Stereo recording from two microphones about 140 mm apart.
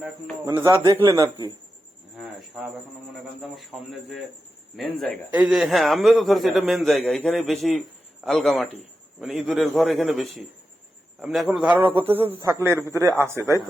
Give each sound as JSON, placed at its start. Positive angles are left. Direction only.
{"t": 0.4, "sound": "a man's voice", "side_deg": -25}
{"t": 3.5, "sound": "a man's voice", "side_deg": 0}